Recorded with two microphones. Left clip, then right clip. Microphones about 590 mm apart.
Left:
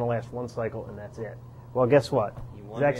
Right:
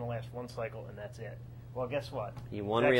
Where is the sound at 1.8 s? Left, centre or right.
Left.